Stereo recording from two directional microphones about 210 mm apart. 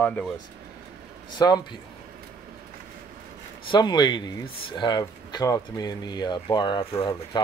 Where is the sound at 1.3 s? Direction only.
20° left (ahead or behind).